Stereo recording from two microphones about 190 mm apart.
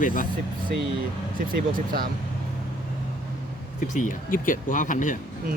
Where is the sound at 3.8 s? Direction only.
40° left (ahead or behind).